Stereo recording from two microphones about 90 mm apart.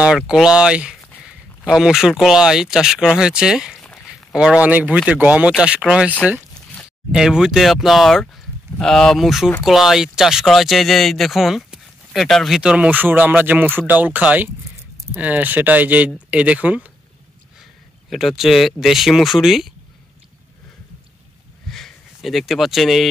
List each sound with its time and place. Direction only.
0.0 s speech: 10° right (ahead or behind)
6.5 s a sound: 10° left (ahead or behind)
7.1 s speech: 5° right (ahead or behind)
12.5 s speech: 15° right (ahead or behind)
18.1 s speech: 5° right (ahead or behind)
21.6 s a sound: 5° left (ahead or behind)